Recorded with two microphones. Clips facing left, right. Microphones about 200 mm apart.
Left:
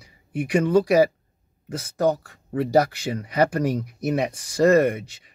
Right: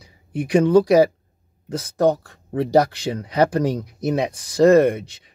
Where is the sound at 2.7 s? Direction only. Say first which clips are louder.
Right 3 dB; 5° left (ahead or behind).